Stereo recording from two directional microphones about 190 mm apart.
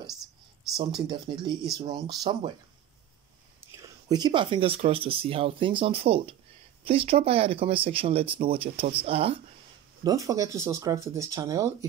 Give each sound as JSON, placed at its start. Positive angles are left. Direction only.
{"t": 0.1, "sound": "a sound", "side_deg": 0}
{"t": 0.7, "sound": "speech", "side_deg": -25}
{"t": 3.7, "sound": "speech", "side_deg": -20}
{"t": 10.0, "sound": "speech", "side_deg": -15}